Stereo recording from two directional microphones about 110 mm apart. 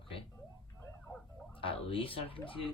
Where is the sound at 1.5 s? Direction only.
55° left (ahead or behind).